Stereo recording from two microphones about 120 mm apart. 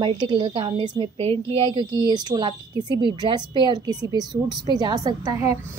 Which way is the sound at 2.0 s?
35° right (ahead or behind).